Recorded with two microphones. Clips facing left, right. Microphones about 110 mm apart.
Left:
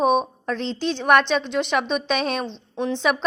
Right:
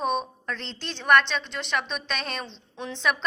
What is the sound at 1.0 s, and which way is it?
A woman's voice, 10° left (ahead or behind).